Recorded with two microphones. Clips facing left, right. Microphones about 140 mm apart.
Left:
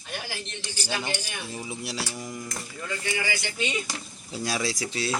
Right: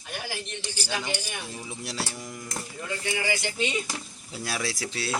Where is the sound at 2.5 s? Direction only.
25° right (ahead or behind).